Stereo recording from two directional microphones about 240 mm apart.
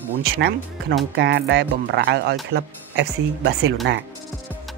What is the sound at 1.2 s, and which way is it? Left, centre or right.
Speech, right.